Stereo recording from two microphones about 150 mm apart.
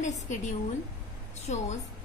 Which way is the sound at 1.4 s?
50° left (ahead or behind).